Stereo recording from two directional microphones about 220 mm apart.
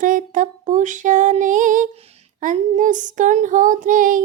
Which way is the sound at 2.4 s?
35° right (ahead or behind).